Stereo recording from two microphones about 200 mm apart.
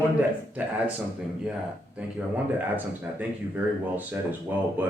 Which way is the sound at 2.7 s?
10° right (ahead or behind).